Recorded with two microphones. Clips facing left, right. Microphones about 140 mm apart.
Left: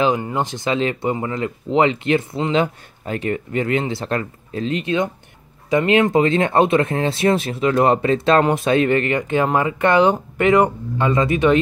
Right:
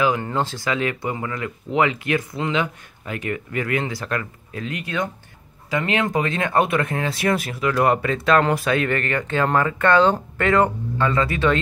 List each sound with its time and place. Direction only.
0.2 s speech: 15° left (ahead or behind)